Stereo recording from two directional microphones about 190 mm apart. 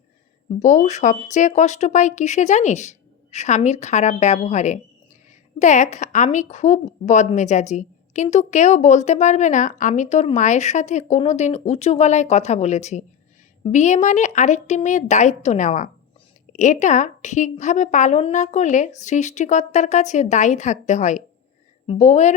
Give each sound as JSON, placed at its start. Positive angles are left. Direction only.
{"t": 0.6, "sound": "a woman's voice", "side_deg": 40}